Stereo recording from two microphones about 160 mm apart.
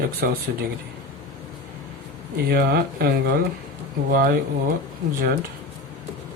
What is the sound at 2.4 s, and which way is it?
Speech, 75° right (ahead or behind).